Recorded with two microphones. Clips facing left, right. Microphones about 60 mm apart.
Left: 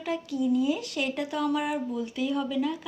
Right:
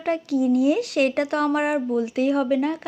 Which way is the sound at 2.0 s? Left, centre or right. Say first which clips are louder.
Right 8 dB; right.